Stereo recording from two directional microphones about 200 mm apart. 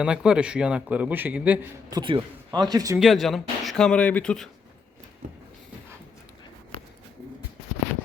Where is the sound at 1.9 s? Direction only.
20° right (ahead or behind).